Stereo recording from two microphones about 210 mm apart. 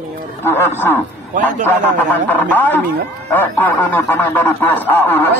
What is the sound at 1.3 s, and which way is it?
Speech, 40° right (ahead or behind).